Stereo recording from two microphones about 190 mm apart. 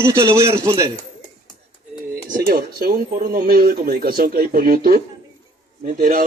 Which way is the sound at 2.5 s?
50° right (ahead or behind).